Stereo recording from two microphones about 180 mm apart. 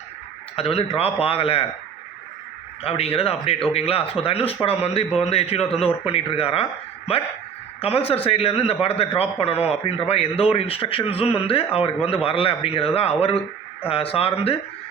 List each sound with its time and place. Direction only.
0.5 s a man's voice: 35° left (ahead or behind)
2.8 s a man's voice: 35° left (ahead or behind)